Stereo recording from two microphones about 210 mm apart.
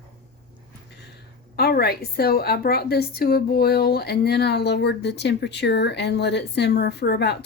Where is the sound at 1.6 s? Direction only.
45° left (ahead or behind).